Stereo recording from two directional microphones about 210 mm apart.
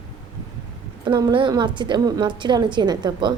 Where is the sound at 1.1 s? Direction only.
20° right (ahead or behind).